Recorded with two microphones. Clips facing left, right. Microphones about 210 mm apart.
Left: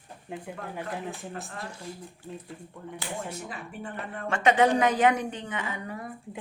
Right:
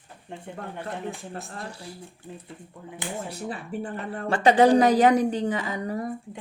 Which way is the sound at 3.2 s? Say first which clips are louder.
Right 4 dB; 35° right (ahead or behind).